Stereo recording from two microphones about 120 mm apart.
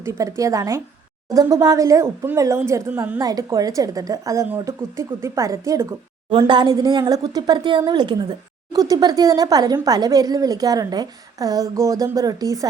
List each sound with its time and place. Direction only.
0.0 s a woman's voice: 25° right (ahead or behind)
2.9 s a woman's voice: 10° right (ahead or behind)
3.2 s a woman's voice: 30° right (ahead or behind)
6.3 s a woman's voice: 40° right (ahead or behind)